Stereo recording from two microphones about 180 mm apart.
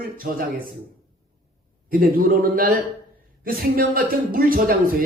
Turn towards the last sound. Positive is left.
turn(degrees=-50)  # may be behind; listen again after turning